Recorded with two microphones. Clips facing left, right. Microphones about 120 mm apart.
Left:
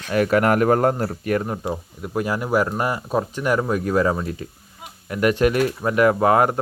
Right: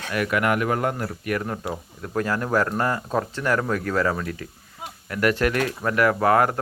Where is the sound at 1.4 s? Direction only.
15° left (ahead or behind).